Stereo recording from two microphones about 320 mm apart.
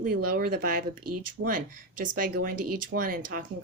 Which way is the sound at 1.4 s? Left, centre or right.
Right.